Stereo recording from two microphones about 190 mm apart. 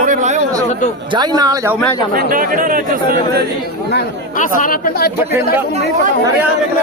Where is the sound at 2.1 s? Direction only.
50° right (ahead or behind).